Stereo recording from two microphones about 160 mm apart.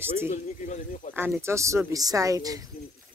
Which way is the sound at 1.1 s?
15° right (ahead or behind).